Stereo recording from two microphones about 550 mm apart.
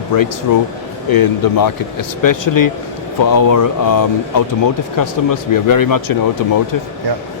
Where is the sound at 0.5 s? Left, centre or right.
Left.